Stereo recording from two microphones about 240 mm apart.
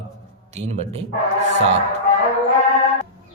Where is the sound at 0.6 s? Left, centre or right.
Right.